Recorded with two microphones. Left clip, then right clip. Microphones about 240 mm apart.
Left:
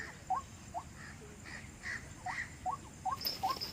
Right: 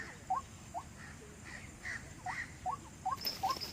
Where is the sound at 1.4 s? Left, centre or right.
Left.